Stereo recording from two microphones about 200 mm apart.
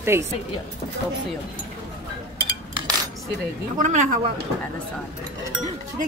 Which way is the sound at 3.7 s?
35° right (ahead or behind).